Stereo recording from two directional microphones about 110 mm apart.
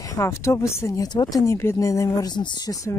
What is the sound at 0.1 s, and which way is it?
Speech, 25° left (ahead or behind).